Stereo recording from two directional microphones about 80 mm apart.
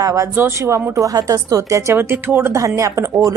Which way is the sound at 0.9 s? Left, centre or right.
Right.